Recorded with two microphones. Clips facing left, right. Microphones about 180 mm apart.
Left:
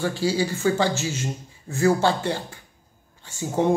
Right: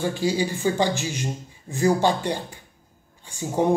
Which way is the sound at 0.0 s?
15° right (ahead or behind).